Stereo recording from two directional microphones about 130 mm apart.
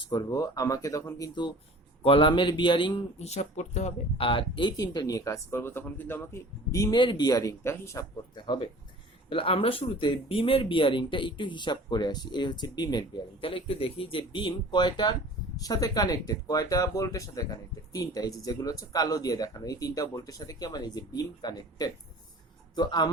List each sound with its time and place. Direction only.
0.1 s speech: 30° left (ahead or behind)
2.0 s speech: 45° left (ahead or behind)
3.2 s speech: 60° left (ahead or behind)
4.3 s speech: 40° left (ahead or behind); by 8.0 s 20° left (ahead or behind)
8.4 s speech: 40° left (ahead or behind)